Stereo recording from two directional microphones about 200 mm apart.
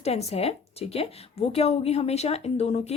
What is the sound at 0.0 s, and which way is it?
A woman's voice, 30° left (ahead or behind).